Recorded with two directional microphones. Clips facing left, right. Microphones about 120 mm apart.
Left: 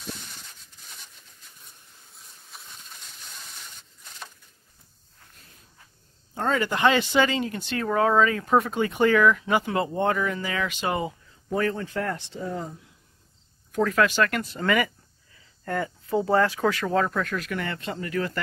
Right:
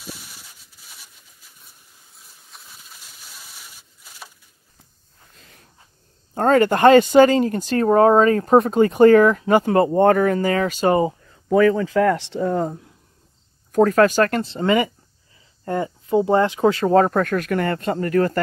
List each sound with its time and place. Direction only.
0.0 s a sound: 5° right (ahead or behind)
6.3 s speech: 50° right (ahead or behind)
12.0 s speech: 90° right; by 12.8 s 55° right (ahead or behind)
13.7 s speech: 40° right (ahead or behind)
14.4 s speech: 25° right (ahead or behind)
16.9 s speech: 45° right (ahead or behind)